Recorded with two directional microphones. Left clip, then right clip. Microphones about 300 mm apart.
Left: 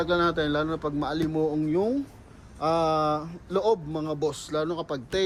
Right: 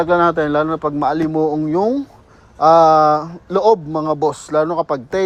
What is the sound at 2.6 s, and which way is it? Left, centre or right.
Speech, right.